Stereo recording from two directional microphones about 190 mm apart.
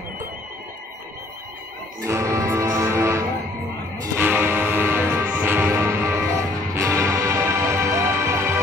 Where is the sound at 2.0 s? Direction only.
15° right (ahead or behind).